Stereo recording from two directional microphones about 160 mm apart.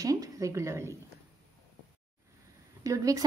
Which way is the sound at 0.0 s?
20° right (ahead or behind).